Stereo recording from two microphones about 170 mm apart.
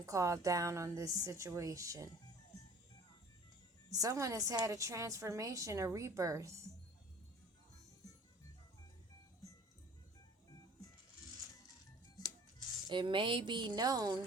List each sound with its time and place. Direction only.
0.0 s a woman's voice: 20° right (ahead or behind)
3.9 s a woman's voice: 20° right (ahead or behind)
12.9 s a woman's voice: 25° right (ahead or behind)